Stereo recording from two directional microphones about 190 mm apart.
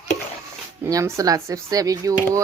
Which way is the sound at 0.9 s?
15° right (ahead or behind).